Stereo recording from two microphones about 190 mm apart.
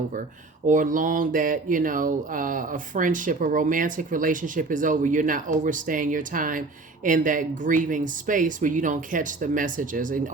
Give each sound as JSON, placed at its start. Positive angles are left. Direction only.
{"t": 0.7, "sound": "speech", "side_deg": -45}